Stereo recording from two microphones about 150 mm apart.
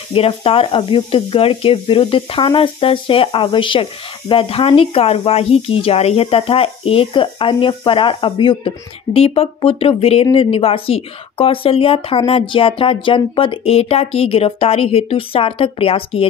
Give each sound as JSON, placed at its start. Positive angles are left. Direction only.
{"t": 0.1, "sound": "speech", "side_deg": 40}